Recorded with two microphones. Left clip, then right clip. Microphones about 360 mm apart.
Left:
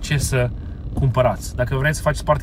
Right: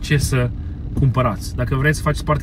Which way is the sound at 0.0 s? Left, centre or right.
Centre.